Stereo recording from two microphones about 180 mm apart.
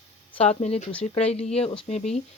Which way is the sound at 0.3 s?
35° left (ahead or behind).